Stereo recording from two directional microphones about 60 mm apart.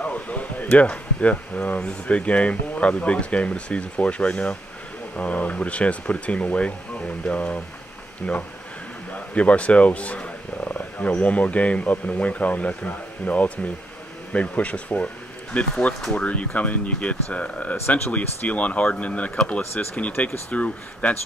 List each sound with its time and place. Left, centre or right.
0.0 s speech: left
16.0 s speech: centre
16.3 s speech: left
17.8 s speech: left
18.1 s speech: left
19.6 s speech: left
20.2 s speech: left